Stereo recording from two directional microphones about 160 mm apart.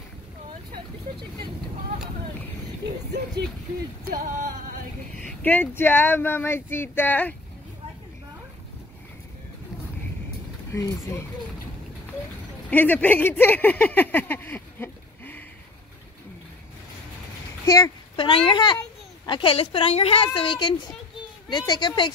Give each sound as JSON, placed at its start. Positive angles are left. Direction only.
{"t": 4.1, "sound": "a sound", "side_deg": -60}
{"t": 5.1, "sound": "speech", "side_deg": 10}
{"t": 10.7, "sound": "speech", "side_deg": 15}
{"t": 12.6, "sound": "speech", "side_deg": 10}
{"t": 17.6, "sound": "speech", "side_deg": 20}
{"t": 18.1, "sound": "a woman's voice", "side_deg": 30}